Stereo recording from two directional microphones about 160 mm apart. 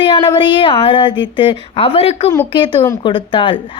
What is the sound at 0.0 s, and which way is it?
A woman's voice, 30° left (ahead or behind).